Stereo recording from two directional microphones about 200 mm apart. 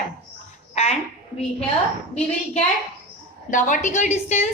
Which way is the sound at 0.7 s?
30° left (ahead or behind).